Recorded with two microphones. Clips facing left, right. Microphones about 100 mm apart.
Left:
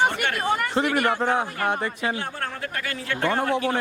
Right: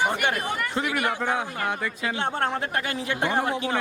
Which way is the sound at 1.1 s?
50° left (ahead or behind).